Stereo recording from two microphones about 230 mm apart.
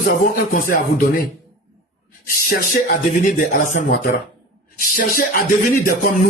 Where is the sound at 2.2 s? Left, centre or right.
Left.